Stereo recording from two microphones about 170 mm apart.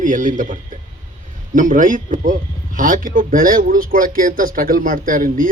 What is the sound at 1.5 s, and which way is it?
Speech, 50° right (ahead or behind).